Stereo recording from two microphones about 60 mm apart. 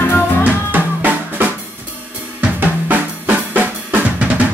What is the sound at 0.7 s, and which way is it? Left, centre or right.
Drum, right.